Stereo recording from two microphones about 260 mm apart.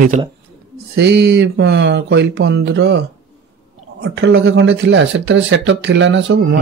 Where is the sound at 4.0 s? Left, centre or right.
Right.